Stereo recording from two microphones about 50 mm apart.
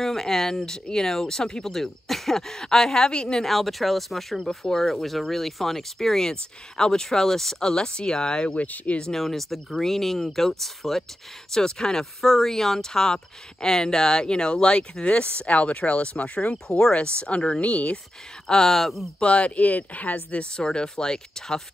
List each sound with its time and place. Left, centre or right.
0.0 s speech: centre
3.4 s speech: centre; by 9.0 s left
9.1 s speech: centre; by 16.5 s left
16.6 s speech: centre
18.5 s speech: centre
19.1 s speech: left
20.5 s speech: centre